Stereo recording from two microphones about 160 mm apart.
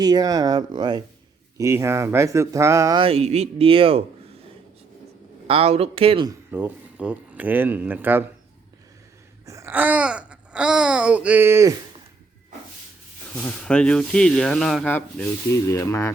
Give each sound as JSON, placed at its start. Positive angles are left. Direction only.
{"t": 0.0, "sound": "speech", "side_deg": -25}
{"t": 3.0, "sound": "speech", "side_deg": -40}
{"t": 5.5, "sound": "speech", "side_deg": -40}
{"t": 6.5, "sound": "speech", "side_deg": -10}
{"t": 9.5, "sound": "speech", "side_deg": -15}
{"t": 13.3, "sound": "speech", "side_deg": 15}
{"t": 14.9, "sound": "speech", "side_deg": 15}